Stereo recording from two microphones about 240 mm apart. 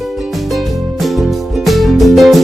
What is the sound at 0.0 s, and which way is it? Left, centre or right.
Music, centre.